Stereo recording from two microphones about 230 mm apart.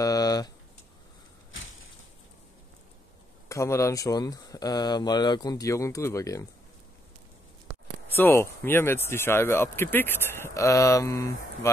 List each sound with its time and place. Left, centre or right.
0.0 s a sound: centre
3.4 s speech: centre
8.2 s speech: centre